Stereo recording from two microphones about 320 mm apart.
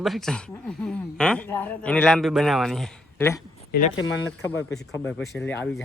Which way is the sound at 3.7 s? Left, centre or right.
Left.